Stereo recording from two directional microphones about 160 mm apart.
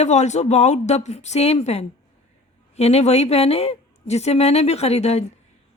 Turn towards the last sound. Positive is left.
turn(degrees=40)  # may be behind; listen again after turning